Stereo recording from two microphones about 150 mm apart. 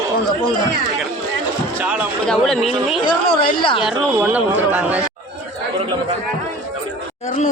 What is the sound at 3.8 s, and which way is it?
A man's voice, 5° right (ahead or behind).